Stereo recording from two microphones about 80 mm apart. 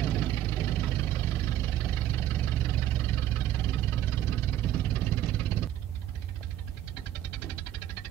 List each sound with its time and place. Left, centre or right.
0.0 s vehicle: left
3.3 s engine: left